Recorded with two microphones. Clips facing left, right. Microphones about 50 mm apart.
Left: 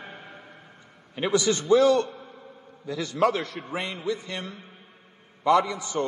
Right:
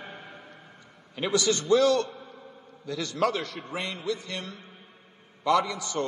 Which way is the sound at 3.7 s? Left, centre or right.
Centre.